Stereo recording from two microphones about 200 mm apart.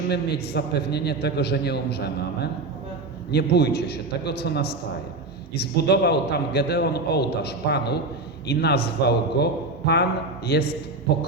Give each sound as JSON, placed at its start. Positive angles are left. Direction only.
{"t": 0.5, "sound": "a man's voice", "side_deg": 55}
{"t": 3.3, "sound": "a man's voice", "side_deg": 55}